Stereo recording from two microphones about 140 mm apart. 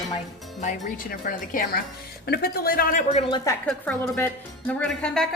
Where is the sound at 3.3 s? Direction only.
30° left (ahead or behind).